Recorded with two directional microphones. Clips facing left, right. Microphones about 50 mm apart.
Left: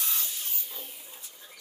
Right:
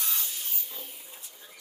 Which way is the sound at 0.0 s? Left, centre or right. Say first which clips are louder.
Even; centre.